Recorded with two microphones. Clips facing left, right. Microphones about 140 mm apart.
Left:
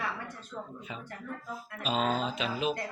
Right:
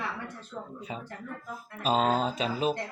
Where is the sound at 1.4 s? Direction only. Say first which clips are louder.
Right 6 dB; 45° right (ahead or behind).